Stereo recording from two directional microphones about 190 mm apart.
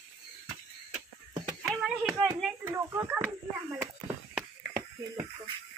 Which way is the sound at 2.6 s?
15° right (ahead or behind).